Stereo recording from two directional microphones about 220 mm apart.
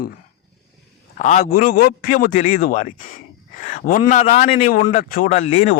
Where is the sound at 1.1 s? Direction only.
30° left (ahead or behind).